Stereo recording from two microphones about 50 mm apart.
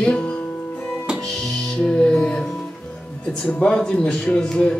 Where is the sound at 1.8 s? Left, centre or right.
Centre.